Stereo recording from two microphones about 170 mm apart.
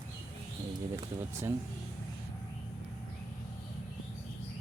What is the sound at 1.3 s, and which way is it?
Speech, 15° right (ahead or behind).